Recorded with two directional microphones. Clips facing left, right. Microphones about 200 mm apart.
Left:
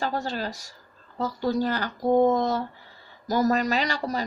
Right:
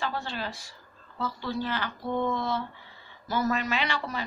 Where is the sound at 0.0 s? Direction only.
40° left (ahead or behind).